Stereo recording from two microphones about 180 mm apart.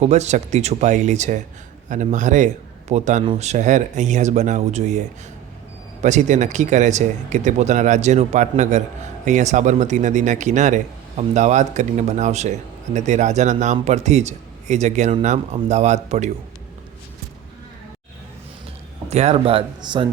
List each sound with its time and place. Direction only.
0.0 s a man's voice: 40° right (ahead or behind)
19.0 s speech: 35° right (ahead or behind)